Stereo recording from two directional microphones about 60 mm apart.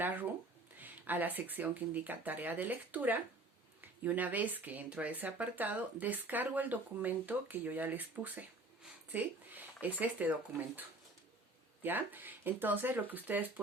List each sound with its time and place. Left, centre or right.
0.8 s speech: right
11.8 s speech: right